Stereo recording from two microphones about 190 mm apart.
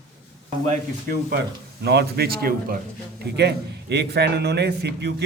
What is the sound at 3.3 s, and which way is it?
A man's voice, 60° right (ahead or behind).